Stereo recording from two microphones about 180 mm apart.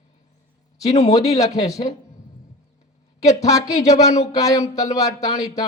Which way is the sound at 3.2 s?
20° left (ahead or behind).